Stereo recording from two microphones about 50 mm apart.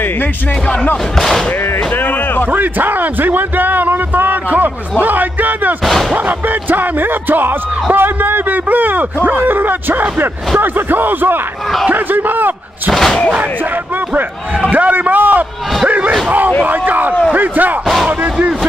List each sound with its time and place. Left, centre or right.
1.1 s speech: centre
2.0 s a sound: left
2.5 s a man's voice: right
5.9 s speech: centre
6.1 s speech: right
14.7 s speech: right
16.3 s a sound: right
17.3 s speech: right